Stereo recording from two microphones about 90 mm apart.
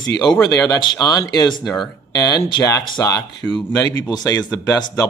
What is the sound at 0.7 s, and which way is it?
Speech, 50° left (ahead or behind).